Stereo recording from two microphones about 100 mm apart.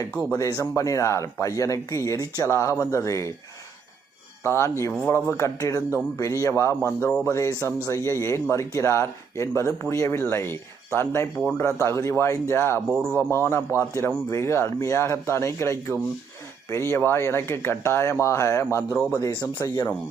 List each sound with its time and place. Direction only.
0.3 s speech: 35° left (ahead or behind)
4.4 s speech: 25° left (ahead or behind)
13.1 s a man's voice: 20° right (ahead or behind)
13.3 s speech: 25° left (ahead or behind)
18.9 s speech: 15° left (ahead or behind)
19.2 s speech: 45° left (ahead or behind)